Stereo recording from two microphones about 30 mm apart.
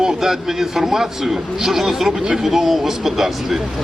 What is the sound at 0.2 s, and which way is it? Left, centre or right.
A man's voice, centre.